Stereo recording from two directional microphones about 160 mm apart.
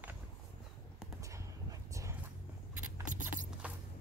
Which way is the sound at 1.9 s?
20° right (ahead or behind).